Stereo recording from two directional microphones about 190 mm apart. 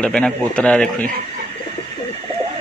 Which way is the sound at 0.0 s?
5° left (ahead or behind).